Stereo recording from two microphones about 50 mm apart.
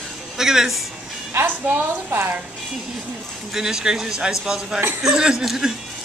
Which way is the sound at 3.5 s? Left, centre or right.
Centre.